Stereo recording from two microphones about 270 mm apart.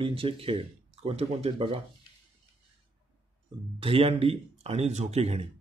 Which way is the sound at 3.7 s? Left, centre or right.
Right.